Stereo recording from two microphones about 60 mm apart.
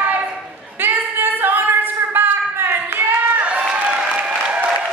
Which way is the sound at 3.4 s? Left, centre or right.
Centre.